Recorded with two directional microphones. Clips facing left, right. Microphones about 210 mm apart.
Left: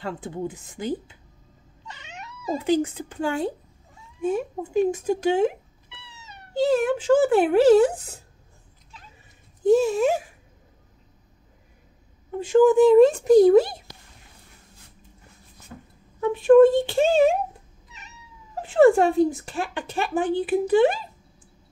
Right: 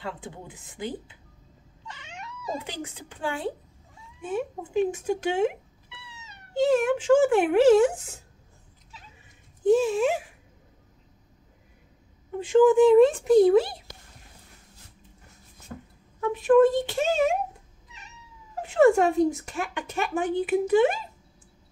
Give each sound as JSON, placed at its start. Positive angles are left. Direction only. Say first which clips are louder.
{"t": 0.0, "sound": "speech", "louder": "left 7 dB", "side_deg": 45}
{"t": 2.6, "sound": "speech", "louder": "left 15 dB", "side_deg": 45}
{"t": 9.7, "sound": "speech", "louder": "left 2 dB", "side_deg": 40}
{"t": 12.4, "sound": "speech", "louder": "left 2 dB", "side_deg": 40}
{"t": 16.2, "sound": "speech", "louder": "left 5 dB", "side_deg": 30}
{"t": 18.6, "sound": "speech", "louder": "left 3 dB", "side_deg": 35}